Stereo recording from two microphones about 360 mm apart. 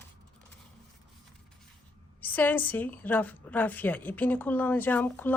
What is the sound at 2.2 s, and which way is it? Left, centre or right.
A woman's voice, centre.